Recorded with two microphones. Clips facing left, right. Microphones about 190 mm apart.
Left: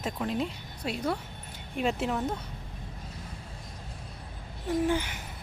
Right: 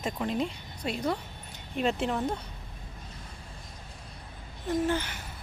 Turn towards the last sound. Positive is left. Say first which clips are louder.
# left 1 dB
turn(degrees=15)  # may be behind; listen again after turning